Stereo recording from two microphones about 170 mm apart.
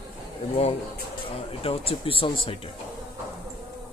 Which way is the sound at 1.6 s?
35° left (ahead or behind).